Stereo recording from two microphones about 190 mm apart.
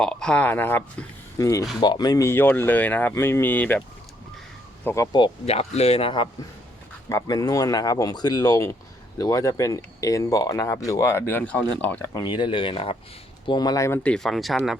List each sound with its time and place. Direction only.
0.0 s speech: 5° left (ahead or behind)
5.1 s speech: 30° left (ahead or behind)
7.1 s speech: 20° left (ahead or behind)
12.1 s speech: 25° left (ahead or behind); by 14.8 s centre (ahead or behind)